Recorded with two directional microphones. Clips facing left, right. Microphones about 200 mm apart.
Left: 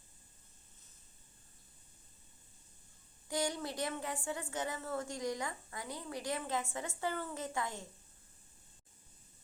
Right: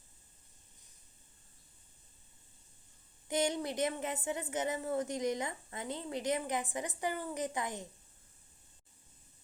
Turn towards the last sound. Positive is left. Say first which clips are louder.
# right 3 dB
turn(degrees=-20)  # may be behind; listen again after turning